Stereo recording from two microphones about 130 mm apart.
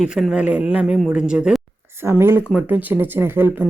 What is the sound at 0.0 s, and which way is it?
Speech, 5° right (ahead or behind).